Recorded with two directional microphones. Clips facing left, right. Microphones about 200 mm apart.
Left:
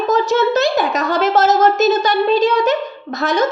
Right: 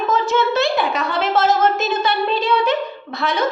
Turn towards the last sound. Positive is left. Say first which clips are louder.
# left 4 dB
turn(degrees=45)  # may be behind; listen again after turning